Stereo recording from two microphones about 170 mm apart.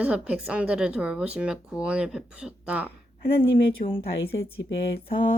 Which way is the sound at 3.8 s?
45° left (ahead or behind).